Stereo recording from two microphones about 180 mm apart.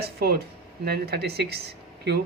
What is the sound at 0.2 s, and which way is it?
Speech, 60° right (ahead or behind).